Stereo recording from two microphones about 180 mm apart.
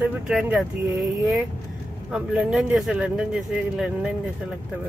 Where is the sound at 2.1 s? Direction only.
5° right (ahead or behind).